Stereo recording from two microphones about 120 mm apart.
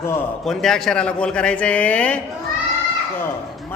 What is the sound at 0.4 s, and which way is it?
A man's voice, 5° left (ahead or behind).